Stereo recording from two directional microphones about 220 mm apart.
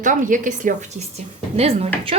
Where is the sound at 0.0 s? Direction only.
35° right (ahead or behind).